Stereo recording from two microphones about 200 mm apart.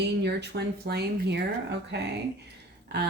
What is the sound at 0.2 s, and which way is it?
A woman's voice, 55° right (ahead or behind).